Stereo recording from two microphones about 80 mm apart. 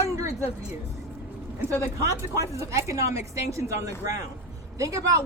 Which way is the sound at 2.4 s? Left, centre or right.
Right.